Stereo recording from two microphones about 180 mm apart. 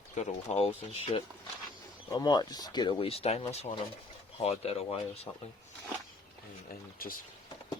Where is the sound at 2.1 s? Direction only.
25° left (ahead or behind).